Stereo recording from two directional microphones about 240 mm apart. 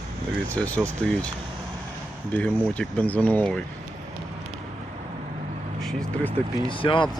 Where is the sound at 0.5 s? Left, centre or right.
Centre.